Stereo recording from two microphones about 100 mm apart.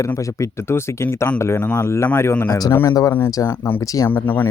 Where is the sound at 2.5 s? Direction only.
40° left (ahead or behind); by 4.5 s 20° left (ahead or behind).